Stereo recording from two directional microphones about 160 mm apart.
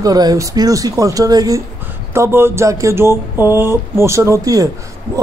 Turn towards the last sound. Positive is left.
turn(degrees=-20)  # may be behind; listen again after turning